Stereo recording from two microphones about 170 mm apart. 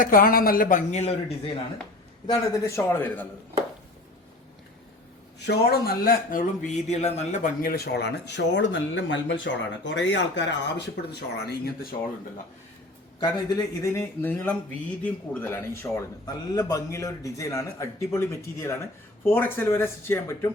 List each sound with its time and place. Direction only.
0.0 s speech: 55° left (ahead or behind)
2.2 s a man's voice: 20° left (ahead or behind)
5.5 s speech: 60° left (ahead or behind)
13.1 s a man's voice: 25° left (ahead or behind)
13.8 s a man's voice: 15° left (ahead or behind)